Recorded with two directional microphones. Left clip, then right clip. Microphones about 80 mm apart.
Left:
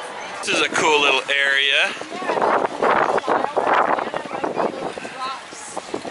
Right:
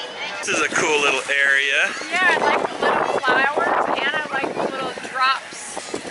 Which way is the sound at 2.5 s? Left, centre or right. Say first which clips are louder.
Left 2 dB; right.